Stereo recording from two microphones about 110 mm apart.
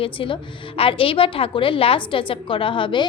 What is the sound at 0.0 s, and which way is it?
A woman's voice, 50° left (ahead or behind).